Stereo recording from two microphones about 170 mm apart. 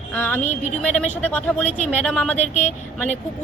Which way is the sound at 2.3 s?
40° left (ahead or behind).